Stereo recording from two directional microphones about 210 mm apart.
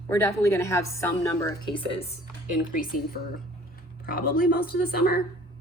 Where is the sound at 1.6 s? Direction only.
25° left (ahead or behind).